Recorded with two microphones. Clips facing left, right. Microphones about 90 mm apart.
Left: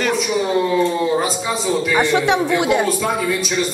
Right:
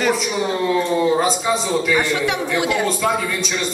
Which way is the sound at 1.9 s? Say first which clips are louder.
Left 6 dB; 20° left (ahead or behind).